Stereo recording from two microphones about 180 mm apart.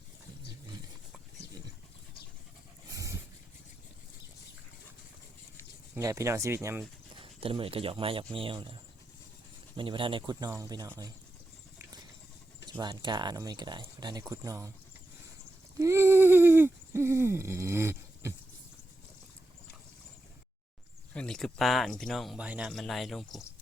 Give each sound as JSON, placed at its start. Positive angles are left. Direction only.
{"t": 2.9, "sound": "dog", "side_deg": -15}
{"t": 6.0, "sound": "speech", "side_deg": -15}
{"t": 7.2, "sound": "speech", "side_deg": -30}
{"t": 12.8, "sound": "speech", "side_deg": -25}
{"t": 15.8, "sound": "a sound", "side_deg": -15}
{"t": 21.1, "sound": "speech", "side_deg": 5}